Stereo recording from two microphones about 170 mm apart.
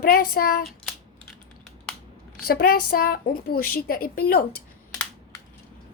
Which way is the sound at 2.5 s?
60° left (ahead or behind).